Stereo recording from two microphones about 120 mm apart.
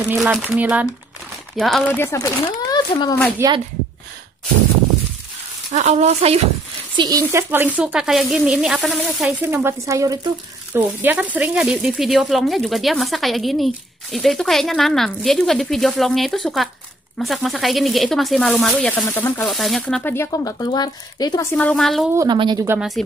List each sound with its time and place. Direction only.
0.2 s speech: 5° right (ahead or behind)
1.6 s speech: centre (ahead or behind)
1.9 s speech: 20° left (ahead or behind); by 3.2 s 35° left (ahead or behind)
3.4 s speech: 25° right (ahead or behind)
5.7 s speech: 70° right (ahead or behind)
7.0 s speech: 30° right (ahead or behind); by 9.3 s centre (ahead or behind)
9.4 s speech: 20° right (ahead or behind); by 19.4 s 15° left (ahead or behind)
19.4 s speech: centre (ahead or behind)
20.0 s speech: 15° left (ahead or behind)
20.2 s speech: 30° left (ahead or behind)
21.5 s speech: 5° left (ahead or behind)
22.3 s speech: 40° right (ahead or behind)
22.8 s speech: centre (ahead or behind)